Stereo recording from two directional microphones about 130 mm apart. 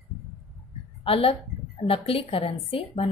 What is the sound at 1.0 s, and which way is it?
A woman's voice, 45° left (ahead or behind).